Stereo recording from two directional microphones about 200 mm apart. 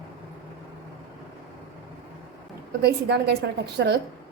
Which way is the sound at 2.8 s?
55° right (ahead or behind).